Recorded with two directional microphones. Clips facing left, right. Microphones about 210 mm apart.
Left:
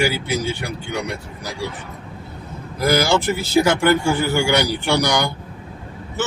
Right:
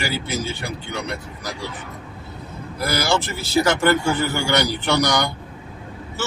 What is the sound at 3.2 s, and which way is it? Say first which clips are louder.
A man's voice: left 3 dB; 15° left (ahead or behind).